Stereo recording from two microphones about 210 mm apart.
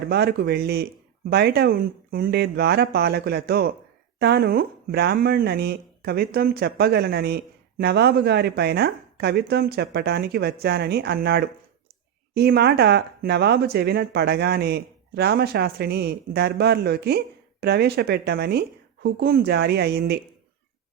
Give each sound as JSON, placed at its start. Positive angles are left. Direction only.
{"t": 0.1, "sound": "speech", "side_deg": -50}